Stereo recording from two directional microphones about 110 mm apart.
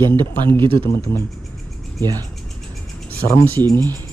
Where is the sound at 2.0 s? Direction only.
35° right (ahead or behind).